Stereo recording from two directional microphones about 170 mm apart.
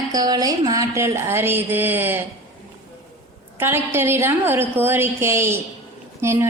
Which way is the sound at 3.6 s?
15° right (ahead or behind).